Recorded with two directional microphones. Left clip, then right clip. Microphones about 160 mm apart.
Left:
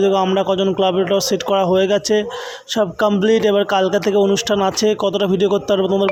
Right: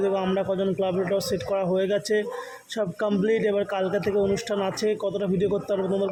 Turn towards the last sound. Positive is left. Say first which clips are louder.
# left 9 dB
turn(degrees=35)  # may be behind; listen again after turning